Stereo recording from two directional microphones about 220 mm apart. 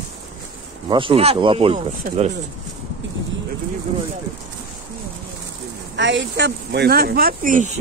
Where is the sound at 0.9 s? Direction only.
25° right (ahead or behind).